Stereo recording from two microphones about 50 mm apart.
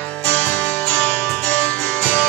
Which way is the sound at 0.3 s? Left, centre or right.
Left.